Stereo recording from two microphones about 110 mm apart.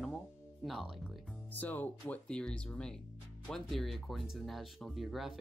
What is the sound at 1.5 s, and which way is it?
Speech, 15° left (ahead or behind).